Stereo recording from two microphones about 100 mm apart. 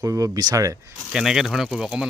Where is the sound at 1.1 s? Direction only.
5° right (ahead or behind).